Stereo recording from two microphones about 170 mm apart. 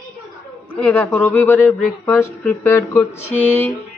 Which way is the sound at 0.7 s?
10° left (ahead or behind).